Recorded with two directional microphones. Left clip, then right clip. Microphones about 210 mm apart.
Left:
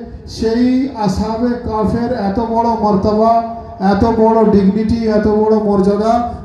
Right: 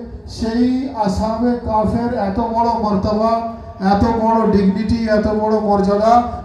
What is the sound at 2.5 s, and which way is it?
Speech, 55° left (ahead or behind).